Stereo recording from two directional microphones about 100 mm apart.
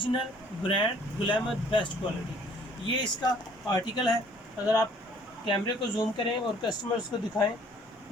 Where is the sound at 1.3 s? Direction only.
55° left (ahead or behind).